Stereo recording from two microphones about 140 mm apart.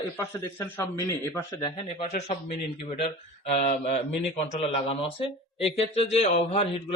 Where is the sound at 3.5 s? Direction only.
50° left (ahead or behind).